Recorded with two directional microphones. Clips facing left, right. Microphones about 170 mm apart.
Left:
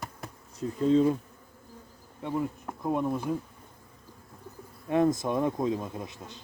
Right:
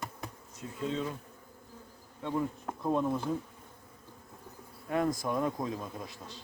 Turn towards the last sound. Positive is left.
turn(degrees=20)  # may be behind; listen again after turning